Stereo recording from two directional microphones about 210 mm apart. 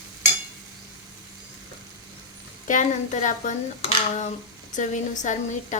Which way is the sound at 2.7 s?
35° left (ahead or behind).